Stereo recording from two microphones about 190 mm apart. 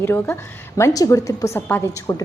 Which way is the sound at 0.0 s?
10° left (ahead or behind).